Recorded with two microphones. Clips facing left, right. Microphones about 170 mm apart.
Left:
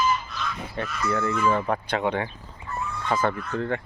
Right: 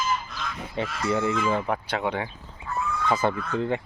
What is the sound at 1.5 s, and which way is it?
Speech, 10° right (ahead or behind).